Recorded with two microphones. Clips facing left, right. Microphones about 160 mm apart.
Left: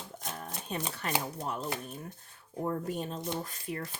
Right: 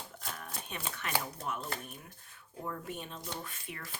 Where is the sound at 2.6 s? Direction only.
40° left (ahead or behind).